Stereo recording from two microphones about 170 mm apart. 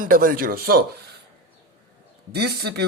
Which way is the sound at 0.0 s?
55° right (ahead or behind).